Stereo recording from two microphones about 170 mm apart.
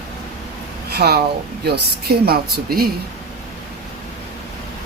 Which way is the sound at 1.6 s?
70° right (ahead or behind).